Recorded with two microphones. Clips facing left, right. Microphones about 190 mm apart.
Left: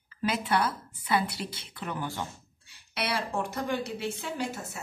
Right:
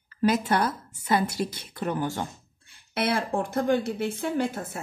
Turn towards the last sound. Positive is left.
turn(degrees=-55)  # may be behind; listen again after turning